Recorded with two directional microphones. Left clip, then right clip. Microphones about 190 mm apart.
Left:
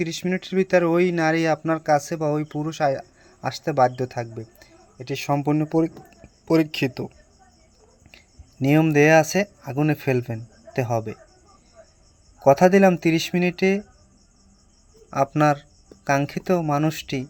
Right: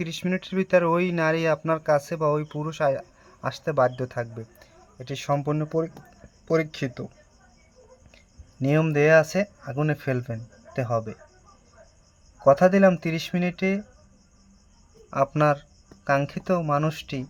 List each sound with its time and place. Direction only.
0.0 s speech: 5° left (ahead or behind)
8.6 s speech: 15° left (ahead or behind)
12.4 s speech: 15° left (ahead or behind)
15.1 s speech: 10° left (ahead or behind)